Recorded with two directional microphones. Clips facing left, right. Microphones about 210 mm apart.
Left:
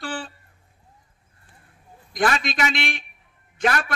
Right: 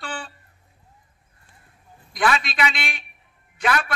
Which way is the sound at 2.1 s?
45° left (ahead or behind).